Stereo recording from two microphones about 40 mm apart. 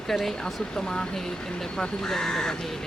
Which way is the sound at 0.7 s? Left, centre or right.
Centre.